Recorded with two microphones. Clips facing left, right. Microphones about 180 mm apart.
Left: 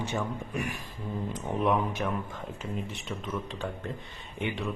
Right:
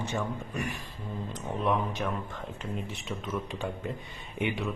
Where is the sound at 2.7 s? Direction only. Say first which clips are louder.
Even; centre (ahead or behind).